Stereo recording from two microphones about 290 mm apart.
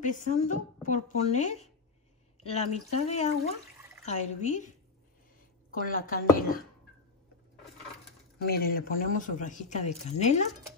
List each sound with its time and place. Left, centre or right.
0.0 s speech: left
5.7 s speech: left
8.4 s speech: left